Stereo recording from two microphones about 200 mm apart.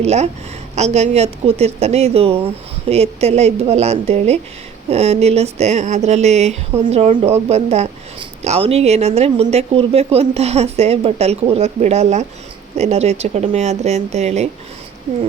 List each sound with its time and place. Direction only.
0.0 s speech: 35° right (ahead or behind)